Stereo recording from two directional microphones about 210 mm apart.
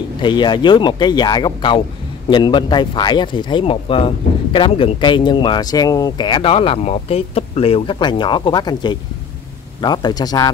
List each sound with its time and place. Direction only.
0.2 s speech: 20° left (ahead or behind)